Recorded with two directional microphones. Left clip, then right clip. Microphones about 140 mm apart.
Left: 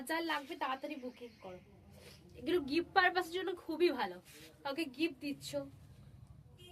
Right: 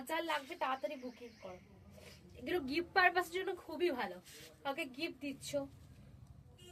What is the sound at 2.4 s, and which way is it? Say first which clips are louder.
A woman's voice: left 3 dB; 20° left (ahead or behind).